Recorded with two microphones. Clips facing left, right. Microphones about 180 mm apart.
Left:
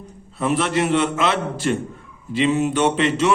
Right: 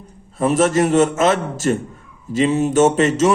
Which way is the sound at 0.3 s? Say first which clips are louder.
Right 5 dB; 45° right (ahead or behind).